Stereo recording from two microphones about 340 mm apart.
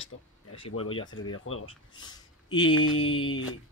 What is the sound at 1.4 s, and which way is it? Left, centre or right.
Speech, left.